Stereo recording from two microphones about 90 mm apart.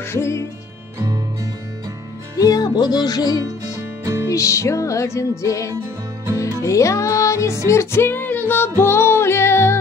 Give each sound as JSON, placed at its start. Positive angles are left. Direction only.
{"t": 0.0, "sound": "music", "side_deg": 30}
{"t": 2.3, "sound": "music", "side_deg": 45}
{"t": 4.0, "sound": "music", "side_deg": -35}
{"t": 4.3, "sound": "music", "side_deg": 35}